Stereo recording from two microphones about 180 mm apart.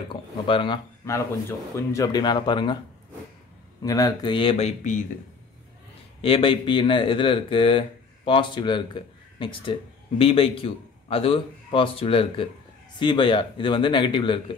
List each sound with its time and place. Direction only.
0.1 s speech: 25° left (ahead or behind)
1.8 s speech: 15° left (ahead or behind)
3.8 s speech: 20° left (ahead or behind); by 5.0 s 40° left (ahead or behind)
6.2 s a man's voice: 30° left (ahead or behind)